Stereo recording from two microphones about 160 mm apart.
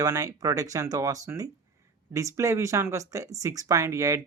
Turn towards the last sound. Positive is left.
turn(degrees=-20)  # may be behind; listen again after turning